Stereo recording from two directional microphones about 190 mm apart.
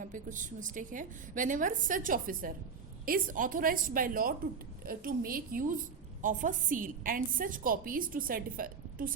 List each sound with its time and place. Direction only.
0.0 s a woman's voice: 40° right (ahead or behind)